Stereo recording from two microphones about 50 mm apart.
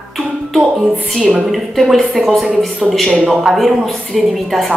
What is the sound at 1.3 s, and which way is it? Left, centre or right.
Speech, centre.